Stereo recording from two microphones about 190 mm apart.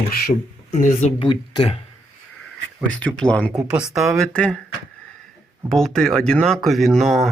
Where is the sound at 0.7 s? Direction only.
40° left (ahead or behind).